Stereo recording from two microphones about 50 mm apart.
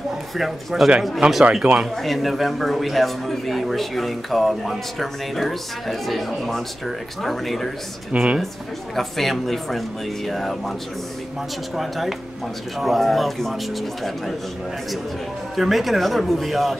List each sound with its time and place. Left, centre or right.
0.4 s a man's voice: centre
1.2 s speech: centre
1.6 s a man's voice: centre
8.1 s speech: right
8.9 s a man's voice: centre
11.7 s a man's voice: centre
15.5 s a man's voice: centre